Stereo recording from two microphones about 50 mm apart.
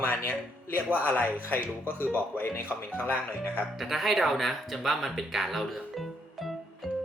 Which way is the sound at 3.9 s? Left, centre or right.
Centre.